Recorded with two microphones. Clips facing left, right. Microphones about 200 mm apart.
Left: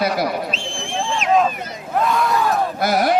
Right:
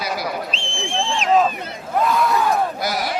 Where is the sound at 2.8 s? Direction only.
55° left (ahead or behind).